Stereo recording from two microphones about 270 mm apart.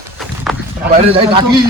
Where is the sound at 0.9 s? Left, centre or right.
Right.